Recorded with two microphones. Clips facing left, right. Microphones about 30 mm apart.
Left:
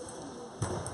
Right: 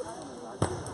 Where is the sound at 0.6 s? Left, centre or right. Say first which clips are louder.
Right 6 dB; right.